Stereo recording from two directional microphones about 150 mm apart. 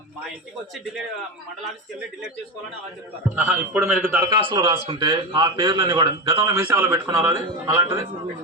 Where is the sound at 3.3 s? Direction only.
10° right (ahead or behind).